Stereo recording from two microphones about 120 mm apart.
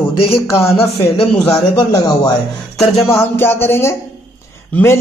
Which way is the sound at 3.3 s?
20° left (ahead or behind).